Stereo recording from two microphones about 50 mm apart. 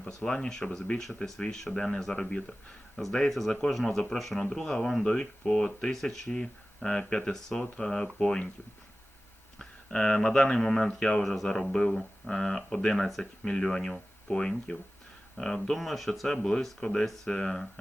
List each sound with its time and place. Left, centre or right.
0.3 s speech: centre
9.6 s speech: centre
11.2 s speech: centre